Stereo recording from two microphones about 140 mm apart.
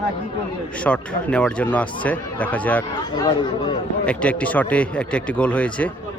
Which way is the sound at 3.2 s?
30° left (ahead or behind).